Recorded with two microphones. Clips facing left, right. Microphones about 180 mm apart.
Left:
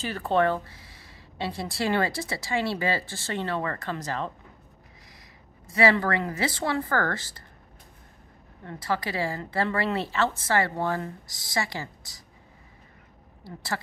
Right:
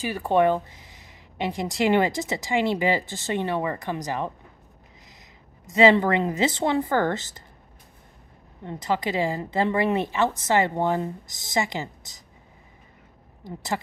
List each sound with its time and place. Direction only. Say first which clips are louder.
0.0 s speech: right 3 dB; 10° right (ahead or behind)
5.7 s speech: right 5 dB; 20° right (ahead or behind)
8.6 s speech: right 3 dB; 20° right (ahead or behind)
13.4 s speech: right 4 dB; 20° right (ahead or behind)